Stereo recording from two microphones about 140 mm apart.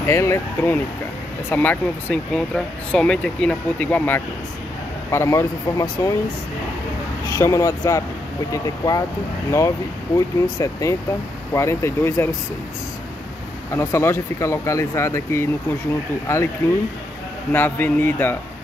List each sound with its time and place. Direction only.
0.0 s speech: 20° left (ahead or behind)
7.2 s speech: 20° left (ahead or behind)
10.1 s speech: 20° left (ahead or behind)
13.7 s speech: 20° left (ahead or behind)
17.5 s speech: 15° left (ahead or behind)